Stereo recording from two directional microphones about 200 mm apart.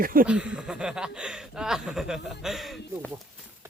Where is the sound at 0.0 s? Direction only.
45° right (ahead or behind).